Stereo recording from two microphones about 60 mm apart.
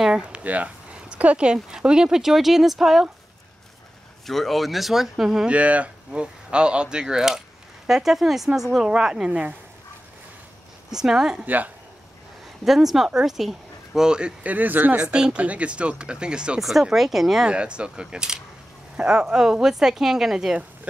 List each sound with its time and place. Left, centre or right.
0.0 s speech: centre
4.3 s speech: centre
5.5 s speech: right
10.9 s speech: centre
11.4 s speech: right
12.6 s speech: centre
14.4 s speech: right
15.0 s speech: centre
17.5 s speech: centre